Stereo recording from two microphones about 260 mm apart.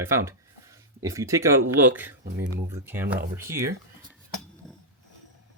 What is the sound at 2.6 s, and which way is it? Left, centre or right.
Speech, centre.